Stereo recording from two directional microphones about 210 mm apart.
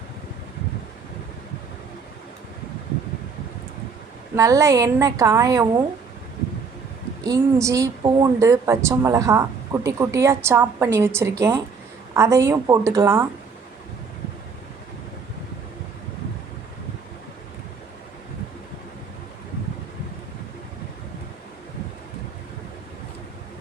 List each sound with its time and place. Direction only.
4.4 s a woman's voice: 15° right (ahead or behind)
7.3 s a woman's voice: 15° right (ahead or behind)